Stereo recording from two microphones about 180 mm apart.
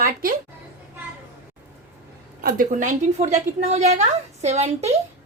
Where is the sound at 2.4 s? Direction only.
50° right (ahead or behind).